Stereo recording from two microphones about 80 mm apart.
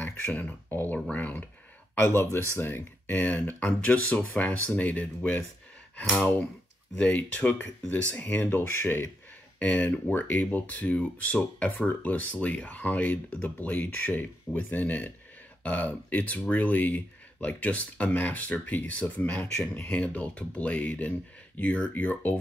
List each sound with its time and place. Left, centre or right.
0.0 s speech: left
19.4 s speech: centre